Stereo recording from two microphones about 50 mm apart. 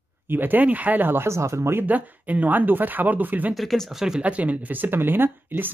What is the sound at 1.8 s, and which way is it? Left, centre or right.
Speech, right.